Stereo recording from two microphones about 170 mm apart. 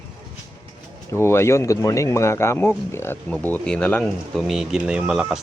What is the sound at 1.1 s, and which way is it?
Speech, 15° left (ahead or behind).